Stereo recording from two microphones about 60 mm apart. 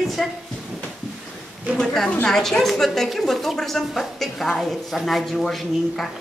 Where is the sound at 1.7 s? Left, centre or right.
Centre.